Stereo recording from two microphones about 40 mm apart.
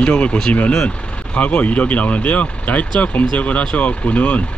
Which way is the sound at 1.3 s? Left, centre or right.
Left.